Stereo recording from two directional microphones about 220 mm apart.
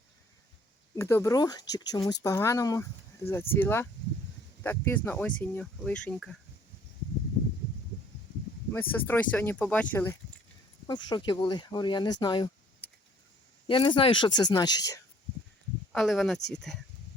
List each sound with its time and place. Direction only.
0.9 s speech: 10° left (ahead or behind)
8.7 s speech: 10° left (ahead or behind)
10.8 s speech: 20° left (ahead or behind)
13.7 s speech: 20° left (ahead or behind)
15.9 s speech: centre (ahead or behind)